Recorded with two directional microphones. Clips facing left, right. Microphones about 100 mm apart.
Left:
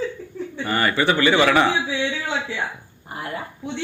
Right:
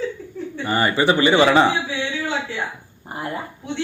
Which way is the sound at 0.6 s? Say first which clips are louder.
Right 2 dB; 25° right (ahead or behind).